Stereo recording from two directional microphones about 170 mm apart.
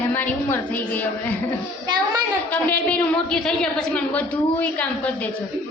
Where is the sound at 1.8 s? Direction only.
25° right (ahead or behind).